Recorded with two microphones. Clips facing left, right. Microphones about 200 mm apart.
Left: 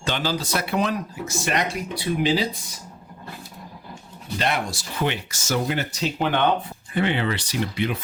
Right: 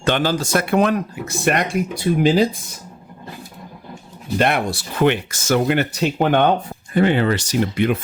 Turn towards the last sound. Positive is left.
turn(degrees=-50)  # may be behind; listen again after turning